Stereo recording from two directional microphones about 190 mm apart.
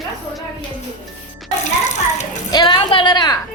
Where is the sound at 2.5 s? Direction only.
25° left (ahead or behind).